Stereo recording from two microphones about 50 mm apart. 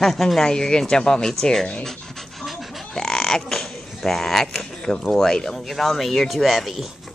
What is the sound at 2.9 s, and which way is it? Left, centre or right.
Creak, centre.